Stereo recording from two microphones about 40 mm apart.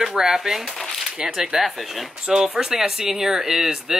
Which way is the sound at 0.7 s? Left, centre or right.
Centre.